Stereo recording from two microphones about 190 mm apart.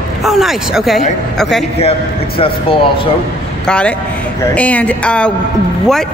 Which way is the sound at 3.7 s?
5° left (ahead or behind).